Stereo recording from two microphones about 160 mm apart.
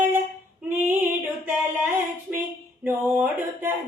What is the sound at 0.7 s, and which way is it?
Female singing, 15° right (ahead or behind).